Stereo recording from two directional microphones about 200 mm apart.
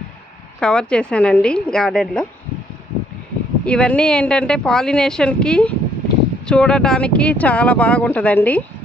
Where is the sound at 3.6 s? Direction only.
5° left (ahead or behind).